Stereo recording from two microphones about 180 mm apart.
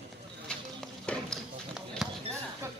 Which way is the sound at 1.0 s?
5° left (ahead or behind).